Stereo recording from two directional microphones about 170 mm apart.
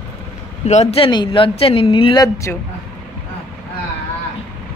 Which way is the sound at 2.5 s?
10° left (ahead or behind).